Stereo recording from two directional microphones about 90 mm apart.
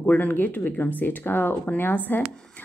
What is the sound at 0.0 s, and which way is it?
Speech, 15° left (ahead or behind).